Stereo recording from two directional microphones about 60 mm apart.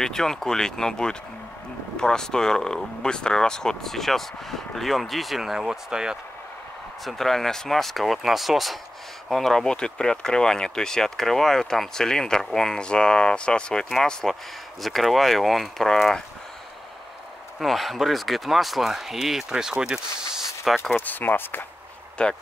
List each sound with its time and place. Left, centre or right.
0.0 s speech: centre
7.1 s speech: centre
17.6 s speech: centre
20.9 s speech: left
22.2 s speech: centre